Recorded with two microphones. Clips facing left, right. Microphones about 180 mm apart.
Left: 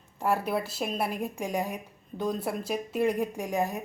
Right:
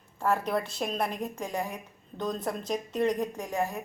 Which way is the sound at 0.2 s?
10° left (ahead or behind).